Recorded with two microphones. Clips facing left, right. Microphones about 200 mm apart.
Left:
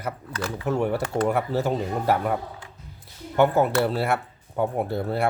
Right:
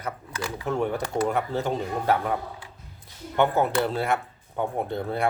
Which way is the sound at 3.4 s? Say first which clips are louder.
Left 3 dB; 5° left (ahead or behind).